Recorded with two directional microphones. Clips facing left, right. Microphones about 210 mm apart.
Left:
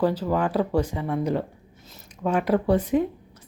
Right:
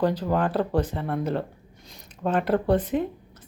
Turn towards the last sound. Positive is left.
turn(degrees=10)  # may be behind; listen again after turning